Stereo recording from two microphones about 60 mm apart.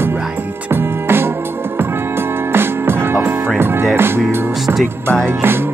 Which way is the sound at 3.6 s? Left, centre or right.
Right.